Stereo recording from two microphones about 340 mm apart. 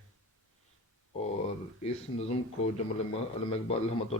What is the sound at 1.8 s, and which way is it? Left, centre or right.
A man's voice, centre.